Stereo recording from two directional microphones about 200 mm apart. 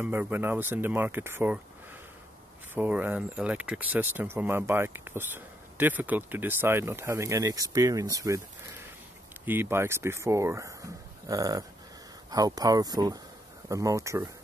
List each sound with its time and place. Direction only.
0.0 s speech: 10° right (ahead or behind)
2.7 s speech: 10° right (ahead or behind)